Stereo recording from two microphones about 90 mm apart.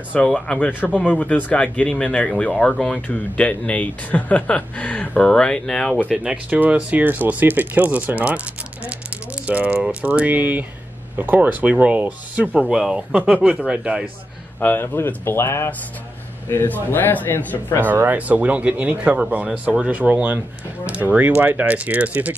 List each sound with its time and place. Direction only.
0.1 s speech: 10° left (ahead or behind)
5.9 s speech: 10° right (ahead or behind)
8.8 s a sound: 15° right (ahead or behind)
9.8 s speech: 15° right (ahead or behind)
14.6 s speech: 25° left (ahead or behind)
17.8 s speech: 20° right (ahead or behind)